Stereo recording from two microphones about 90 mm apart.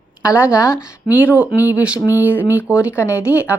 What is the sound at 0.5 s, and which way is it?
Speech, 45° left (ahead or behind).